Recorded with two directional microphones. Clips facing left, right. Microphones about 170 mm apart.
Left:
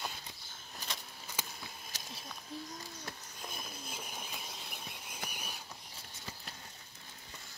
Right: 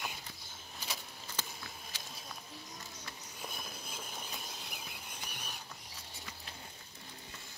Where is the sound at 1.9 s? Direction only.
40° left (ahead or behind).